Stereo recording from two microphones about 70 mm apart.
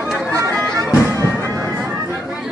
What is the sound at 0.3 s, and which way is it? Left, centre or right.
Music, right.